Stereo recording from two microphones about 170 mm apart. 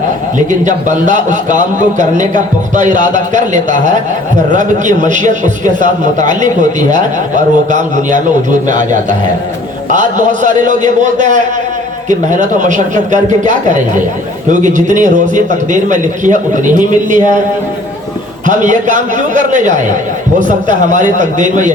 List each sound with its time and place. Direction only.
0.3 s a man's voice: 45° right (ahead or behind)
14.5 s a man's voice: 45° right (ahead or behind)
18.4 s a man's voice: 45° right (ahead or behind)